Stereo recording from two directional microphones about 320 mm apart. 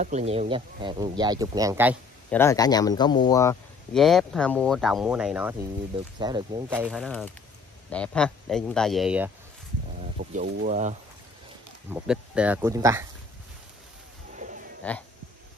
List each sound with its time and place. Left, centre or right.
0.0 s speech: right
2.3 s a man's voice: centre
10.1 s speech: right
11.9 s speech: centre
14.8 s speech: centre